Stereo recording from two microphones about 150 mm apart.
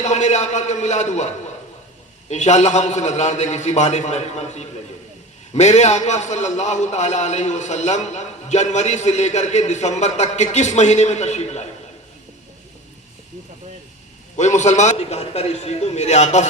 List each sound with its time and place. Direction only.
0.0 s a man's voice: 50° left (ahead or behind)
2.3 s a man's voice: 50° left (ahead or behind)
14.3 s a man's voice: 50° left (ahead or behind)